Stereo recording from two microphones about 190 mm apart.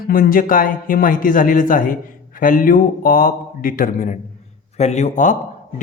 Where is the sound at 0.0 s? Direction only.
50° left (ahead or behind).